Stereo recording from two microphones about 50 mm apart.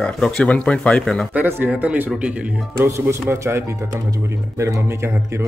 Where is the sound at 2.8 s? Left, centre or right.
Right.